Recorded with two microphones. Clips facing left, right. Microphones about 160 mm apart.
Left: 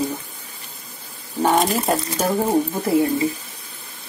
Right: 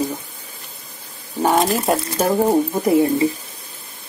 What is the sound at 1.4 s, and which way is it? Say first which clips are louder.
Speech: right 1 dB; 5° right (ahead or behind).